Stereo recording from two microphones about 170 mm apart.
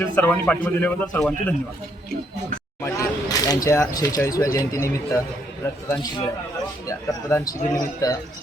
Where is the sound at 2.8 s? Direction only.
20° left (ahead or behind).